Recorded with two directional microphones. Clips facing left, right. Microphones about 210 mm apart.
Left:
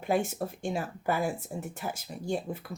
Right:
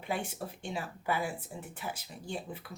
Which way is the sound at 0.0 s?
45° left (ahead or behind).